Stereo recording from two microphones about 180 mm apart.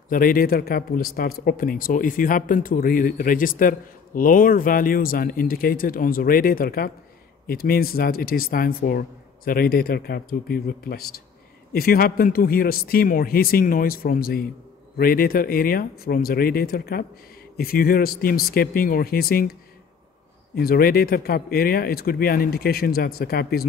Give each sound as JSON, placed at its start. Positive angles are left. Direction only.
{"t": 0.1, "sound": "speech", "side_deg": 50}
{"t": 20.5, "sound": "speech", "side_deg": 55}